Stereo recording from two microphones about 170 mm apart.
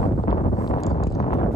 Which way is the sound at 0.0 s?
45° left (ahead or behind).